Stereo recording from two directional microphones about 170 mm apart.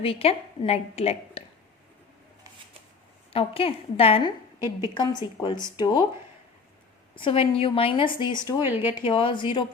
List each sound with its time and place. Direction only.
0.0 s a woman's voice: 35° left (ahead or behind)
3.3 s a woman's voice: 35° left (ahead or behind)
5.4 s a woman's voice: 30° left (ahead or behind)
7.2 s a woman's voice: 30° left (ahead or behind)
8.6 s speech: 15° right (ahead or behind)
9.0 s a woman's voice: 30° left (ahead or behind)